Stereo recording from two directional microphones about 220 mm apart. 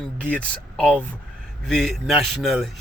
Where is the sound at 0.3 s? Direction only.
5° left (ahead or behind).